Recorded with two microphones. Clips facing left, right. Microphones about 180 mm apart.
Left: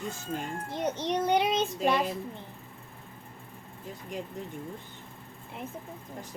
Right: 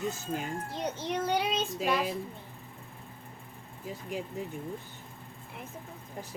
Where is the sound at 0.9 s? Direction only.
20° left (ahead or behind).